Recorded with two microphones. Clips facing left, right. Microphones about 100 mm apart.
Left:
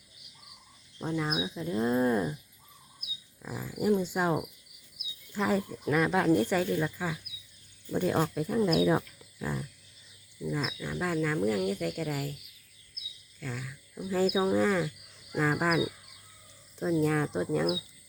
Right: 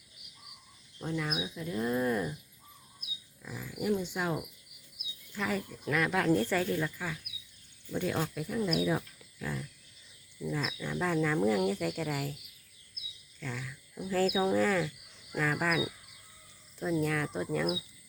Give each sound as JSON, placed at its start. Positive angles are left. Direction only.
{"t": 0.9, "sound": "speech", "side_deg": 25}
{"t": 3.4, "sound": "speech", "side_deg": 35}
{"t": 7.9, "sound": "speech", "side_deg": 35}
{"t": 9.4, "sound": "speech", "side_deg": 30}
{"t": 10.5, "sound": "speech", "side_deg": 15}
{"t": 13.4, "sound": "speech", "side_deg": 10}
{"t": 17.0, "sound": "speech", "side_deg": 25}